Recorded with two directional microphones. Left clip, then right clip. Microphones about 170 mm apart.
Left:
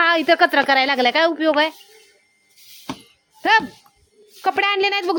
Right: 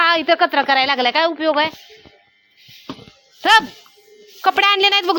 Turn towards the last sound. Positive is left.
turn(degrees=0)  # may be behind; listen again after turning